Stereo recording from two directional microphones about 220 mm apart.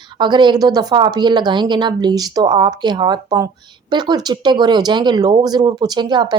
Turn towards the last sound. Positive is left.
turn(degrees=-20)  # may be behind; listen again after turning